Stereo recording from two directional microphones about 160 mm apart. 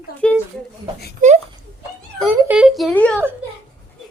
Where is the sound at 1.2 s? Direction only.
55° right (ahead or behind).